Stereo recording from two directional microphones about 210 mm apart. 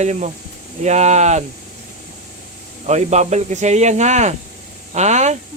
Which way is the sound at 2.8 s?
35° right (ahead or behind).